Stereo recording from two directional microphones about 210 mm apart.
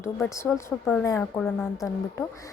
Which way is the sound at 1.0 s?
15° left (ahead or behind).